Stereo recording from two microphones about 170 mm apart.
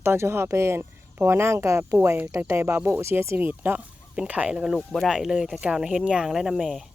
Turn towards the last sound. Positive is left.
turn(degrees=-5)  # may be behind; listen again after turning